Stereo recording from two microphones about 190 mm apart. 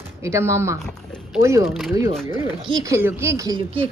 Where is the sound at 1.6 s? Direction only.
Centre (ahead or behind).